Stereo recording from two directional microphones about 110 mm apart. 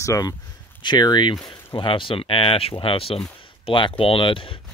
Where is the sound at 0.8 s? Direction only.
45° left (ahead or behind).